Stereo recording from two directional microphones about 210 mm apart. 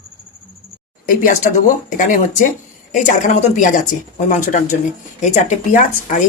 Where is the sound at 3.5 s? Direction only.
35° left (ahead or behind).